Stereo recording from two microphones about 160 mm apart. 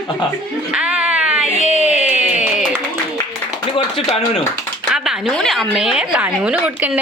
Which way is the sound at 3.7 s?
40° left (ahead or behind).